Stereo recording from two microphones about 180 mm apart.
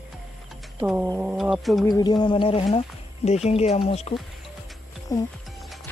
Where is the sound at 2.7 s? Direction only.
35° left (ahead or behind).